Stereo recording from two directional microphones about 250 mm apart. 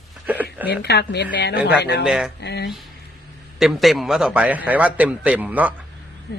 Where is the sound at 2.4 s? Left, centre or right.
Left.